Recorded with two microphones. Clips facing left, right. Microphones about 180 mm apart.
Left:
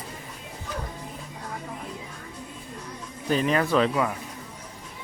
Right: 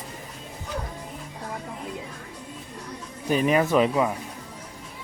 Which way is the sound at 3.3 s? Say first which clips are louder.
Right 2 dB; 10° right (ahead or behind).